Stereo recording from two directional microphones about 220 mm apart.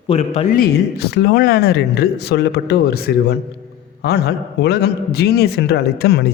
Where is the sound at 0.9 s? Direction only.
50° left (ahead or behind).